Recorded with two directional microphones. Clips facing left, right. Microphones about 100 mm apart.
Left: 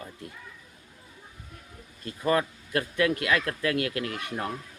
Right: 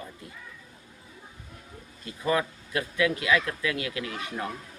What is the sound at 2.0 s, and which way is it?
A man's voice, 45° left (ahead or behind).